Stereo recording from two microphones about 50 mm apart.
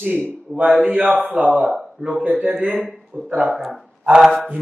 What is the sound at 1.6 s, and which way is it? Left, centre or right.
Speech, centre.